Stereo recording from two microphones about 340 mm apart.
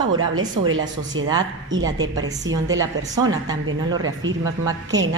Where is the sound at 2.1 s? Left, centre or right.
Right.